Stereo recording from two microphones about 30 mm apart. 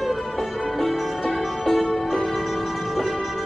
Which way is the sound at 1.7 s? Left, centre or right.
Centre.